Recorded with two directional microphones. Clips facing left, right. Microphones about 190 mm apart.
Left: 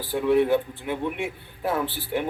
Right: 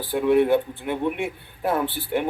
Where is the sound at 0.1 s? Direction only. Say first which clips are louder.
Right 2 dB; 55° right (ahead or behind).